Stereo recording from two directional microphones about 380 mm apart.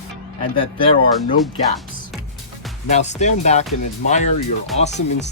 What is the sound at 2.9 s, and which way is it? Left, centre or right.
Speech, centre.